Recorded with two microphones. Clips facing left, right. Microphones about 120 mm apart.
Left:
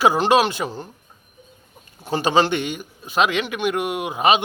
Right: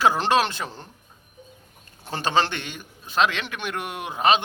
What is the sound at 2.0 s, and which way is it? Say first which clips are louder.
A man's voice: left 5 dB; 10° left (ahead or behind).